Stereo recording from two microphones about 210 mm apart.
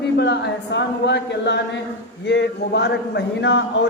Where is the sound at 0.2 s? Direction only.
55° left (ahead or behind).